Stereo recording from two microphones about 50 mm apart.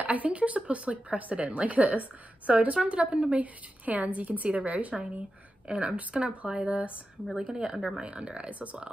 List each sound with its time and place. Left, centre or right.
0.0 s speech: right; by 8.0 s centre
8.0 s speech: right